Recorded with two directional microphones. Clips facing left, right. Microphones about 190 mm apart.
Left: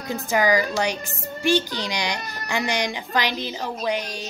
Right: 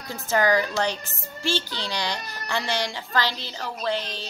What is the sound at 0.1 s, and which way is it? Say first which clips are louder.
A woman's voice: left 1 dB; 10° left (ahead or behind).